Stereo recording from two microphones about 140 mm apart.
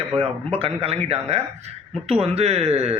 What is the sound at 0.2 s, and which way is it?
Speech, 45° right (ahead or behind).